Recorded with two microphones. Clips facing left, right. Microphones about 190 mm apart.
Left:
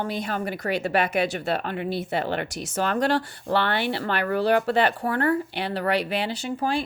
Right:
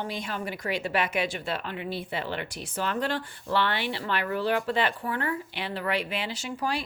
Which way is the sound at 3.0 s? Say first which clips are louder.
Left 7 dB; 80° left.